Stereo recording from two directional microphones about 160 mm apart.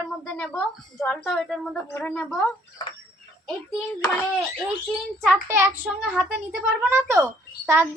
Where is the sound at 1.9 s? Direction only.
15° left (ahead or behind).